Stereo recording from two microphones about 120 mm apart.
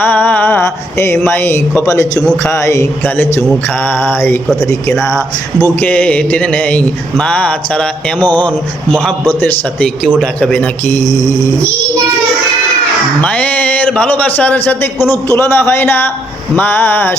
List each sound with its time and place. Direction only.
0.0 s mantra: 15° left (ahead or behind)
1.2 s a man's voice: 15° left (ahead or behind)
5.8 s a man's voice: 10° left (ahead or behind)
8.2 s speech: 40° right (ahead or behind)
9.4 s a man's voice: 10° left (ahead or behind)
13.2 s a man's voice: 10° left (ahead or behind)